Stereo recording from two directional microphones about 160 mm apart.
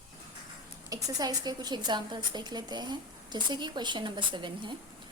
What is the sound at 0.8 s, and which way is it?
A woman's voice, 20° right (ahead or behind).